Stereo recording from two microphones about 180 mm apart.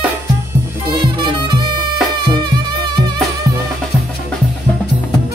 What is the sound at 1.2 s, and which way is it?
Music, 25° right (ahead or behind).